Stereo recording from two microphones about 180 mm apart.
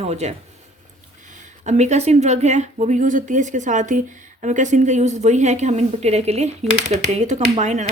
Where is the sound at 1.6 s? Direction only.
40° right (ahead or behind).